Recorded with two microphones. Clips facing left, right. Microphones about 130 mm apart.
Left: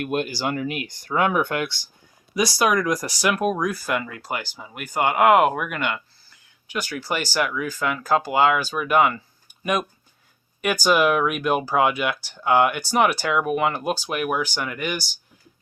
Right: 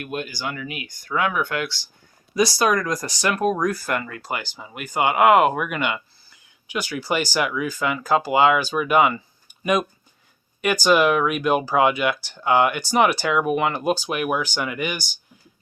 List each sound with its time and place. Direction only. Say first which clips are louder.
0.0 s speech: left 5 dB; 50° left (ahead or behind)
0.3 s speech: left 5 dB; 40° left (ahead or behind)
1.0 s speech: left 2 dB; 30° left (ahead or behind)
2.3 s speech: right 1 dB; 5° left (ahead or behind)
10.6 s speech: right 2 dB; 5° left (ahead or behind)